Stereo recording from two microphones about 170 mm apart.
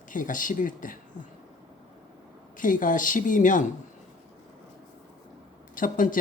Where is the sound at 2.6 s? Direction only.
50° left (ahead or behind).